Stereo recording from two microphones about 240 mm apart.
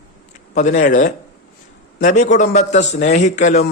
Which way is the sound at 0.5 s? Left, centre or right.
Left.